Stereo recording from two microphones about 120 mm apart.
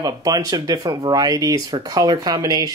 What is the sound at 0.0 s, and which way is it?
Speech, 30° right (ahead or behind).